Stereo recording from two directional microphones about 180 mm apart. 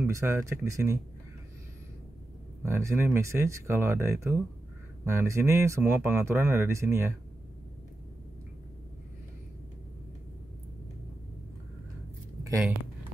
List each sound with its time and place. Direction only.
0.0 s speech: 15° right (ahead or behind)
2.6 s speech: 15° right (ahead or behind)